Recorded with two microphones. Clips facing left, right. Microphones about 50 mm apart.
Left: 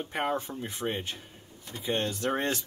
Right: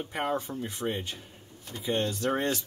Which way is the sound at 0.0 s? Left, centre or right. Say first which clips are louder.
Even; centre.